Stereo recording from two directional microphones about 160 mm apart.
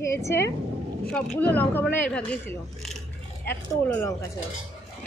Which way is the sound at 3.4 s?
15° left (ahead or behind).